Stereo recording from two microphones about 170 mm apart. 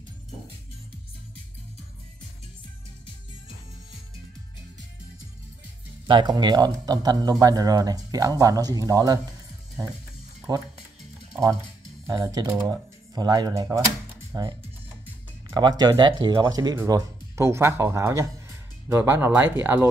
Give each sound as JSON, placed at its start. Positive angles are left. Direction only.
{"t": 6.0, "sound": "speech", "side_deg": -25}
{"t": 12.1, "sound": "speech", "side_deg": -20}
{"t": 15.5, "sound": "speech", "side_deg": -25}